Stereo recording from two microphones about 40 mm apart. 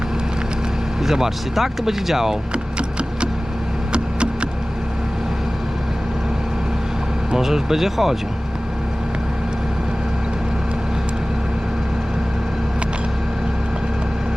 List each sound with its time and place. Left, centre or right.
1.0 s speech: centre
3.9 s a sound: right
7.3 s speech: centre